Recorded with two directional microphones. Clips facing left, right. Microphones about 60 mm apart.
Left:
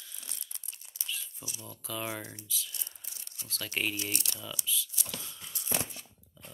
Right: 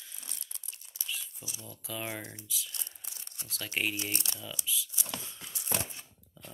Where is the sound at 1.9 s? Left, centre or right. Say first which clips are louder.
Left 1 dB; centre.